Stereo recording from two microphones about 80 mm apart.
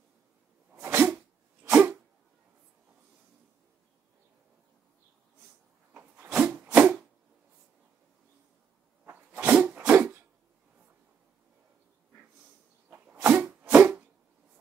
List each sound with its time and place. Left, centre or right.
0.8 s sneeze: right
1.6 s dog: right
6.3 s a sound: centre
9.0 s dog: right
12.9 s sneeze: centre
13.4 s a sound: centre